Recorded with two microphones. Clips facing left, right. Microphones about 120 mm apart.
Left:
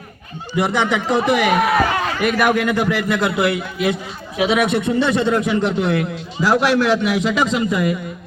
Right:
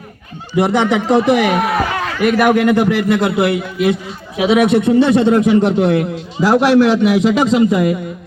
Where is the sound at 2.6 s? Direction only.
55° right (ahead or behind).